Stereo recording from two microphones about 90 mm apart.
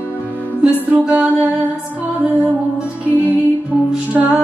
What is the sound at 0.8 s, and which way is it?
Music, 15° right (ahead or behind).